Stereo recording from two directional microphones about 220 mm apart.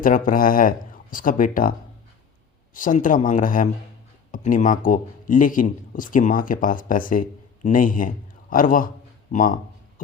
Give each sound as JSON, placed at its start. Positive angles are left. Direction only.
{"t": 0.0, "sound": "speech", "side_deg": 40}
{"t": 2.7, "sound": "speech", "side_deg": 35}